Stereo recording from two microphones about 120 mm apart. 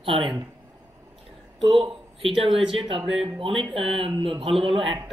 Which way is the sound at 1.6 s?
50° right (ahead or behind).